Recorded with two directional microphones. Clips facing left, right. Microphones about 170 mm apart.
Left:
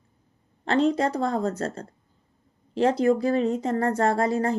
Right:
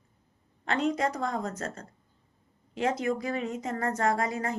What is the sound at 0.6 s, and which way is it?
A woman's voice, 30° left (ahead or behind).